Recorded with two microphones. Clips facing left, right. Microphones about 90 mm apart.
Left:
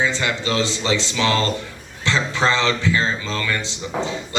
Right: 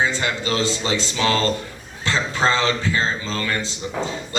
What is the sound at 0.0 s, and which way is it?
A man's voice, 35° right (ahead or behind).